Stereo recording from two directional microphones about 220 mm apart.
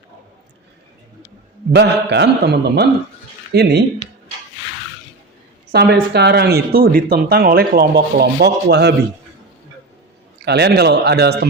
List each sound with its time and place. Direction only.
1.7 s speech: 50° right (ahead or behind)
5.7 s speech: 50° right (ahead or behind)
10.4 s speech: 50° right (ahead or behind)